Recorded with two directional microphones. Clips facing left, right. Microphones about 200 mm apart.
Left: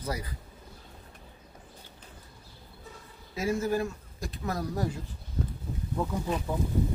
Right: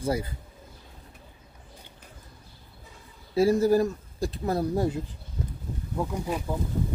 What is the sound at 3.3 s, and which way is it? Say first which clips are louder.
Speech: right 8 dB; 35° right (ahead or behind).